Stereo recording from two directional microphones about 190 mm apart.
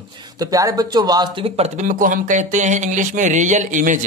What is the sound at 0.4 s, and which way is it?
Speech, 20° right (ahead or behind).